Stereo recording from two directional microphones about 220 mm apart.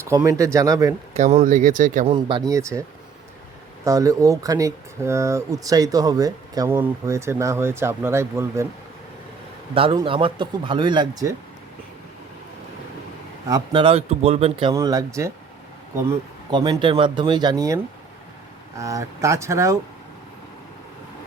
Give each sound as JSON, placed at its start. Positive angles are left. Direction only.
{"t": 0.0, "sound": "speech", "side_deg": -15}
{"t": 1.1, "sound": "speech", "side_deg": -30}
{"t": 2.1, "sound": "speech", "side_deg": -20}
{"t": 3.8, "sound": "speech", "side_deg": -15}
{"t": 9.7, "sound": "speech", "side_deg": -25}
{"t": 13.5, "sound": "speech", "side_deg": -25}
{"t": 14.7, "sound": "speech", "side_deg": -15}
{"t": 16.5, "sound": "speech", "side_deg": -20}
{"t": 18.8, "sound": "speech", "side_deg": -15}